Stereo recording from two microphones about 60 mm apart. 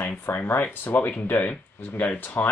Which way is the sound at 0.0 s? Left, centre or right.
Left.